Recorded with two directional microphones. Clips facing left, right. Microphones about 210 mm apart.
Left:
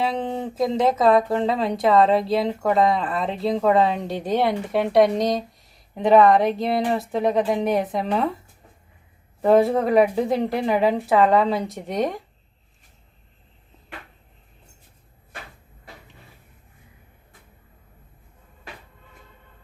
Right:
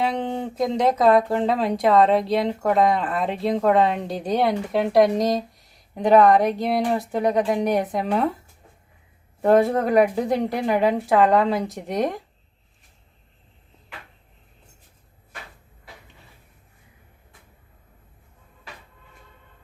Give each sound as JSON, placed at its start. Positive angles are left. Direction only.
{"t": 0.0, "sound": "speech", "side_deg": 0}
{"t": 9.4, "sound": "speech", "side_deg": 0}